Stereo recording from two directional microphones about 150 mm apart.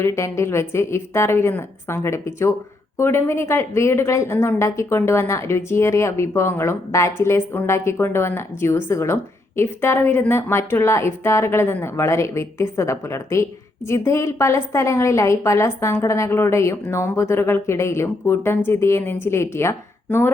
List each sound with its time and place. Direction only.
0.0 s a woman's voice: 20° left (ahead or behind)